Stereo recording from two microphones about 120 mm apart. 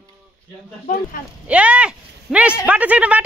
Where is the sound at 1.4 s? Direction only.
10° right (ahead or behind).